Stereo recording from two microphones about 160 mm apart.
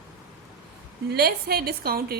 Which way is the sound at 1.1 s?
75° right (ahead or behind).